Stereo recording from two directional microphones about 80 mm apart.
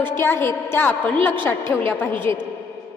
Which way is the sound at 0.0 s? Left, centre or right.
Left.